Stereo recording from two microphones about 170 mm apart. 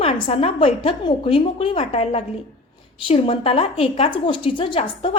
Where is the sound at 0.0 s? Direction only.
35° left (ahead or behind).